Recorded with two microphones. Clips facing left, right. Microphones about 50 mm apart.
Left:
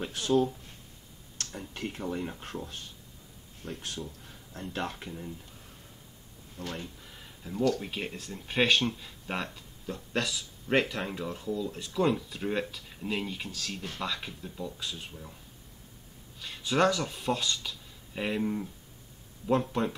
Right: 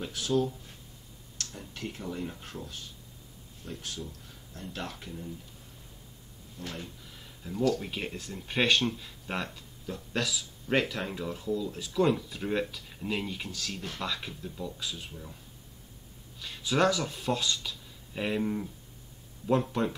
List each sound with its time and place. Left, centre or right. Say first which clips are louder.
0.1 s speech: left 2 dB; left
6.6 s speech: left 2 dB; left
7.2 s a sound: even; centre
7.8 s speech: even; centre
16.3 s speech: even; centre